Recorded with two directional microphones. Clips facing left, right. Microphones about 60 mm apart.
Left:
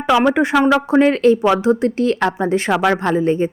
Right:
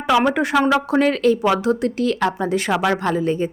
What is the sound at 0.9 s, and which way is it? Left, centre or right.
A woman's voice, left.